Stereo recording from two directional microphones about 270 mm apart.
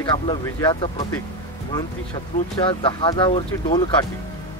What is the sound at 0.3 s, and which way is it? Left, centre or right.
Speech, centre.